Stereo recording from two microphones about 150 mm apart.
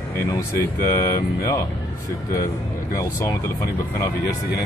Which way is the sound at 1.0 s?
25° left (ahead or behind).